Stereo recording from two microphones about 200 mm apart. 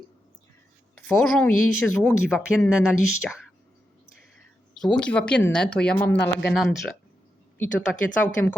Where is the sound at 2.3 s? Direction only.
5° right (ahead or behind).